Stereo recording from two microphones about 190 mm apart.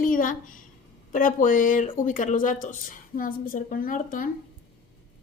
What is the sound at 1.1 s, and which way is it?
A woman's voice, 45° left (ahead or behind).